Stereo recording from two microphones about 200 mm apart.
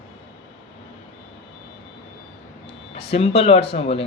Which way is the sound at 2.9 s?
30° left (ahead or behind).